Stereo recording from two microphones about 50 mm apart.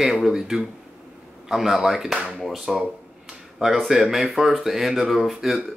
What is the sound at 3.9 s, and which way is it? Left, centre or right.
Speech, centre.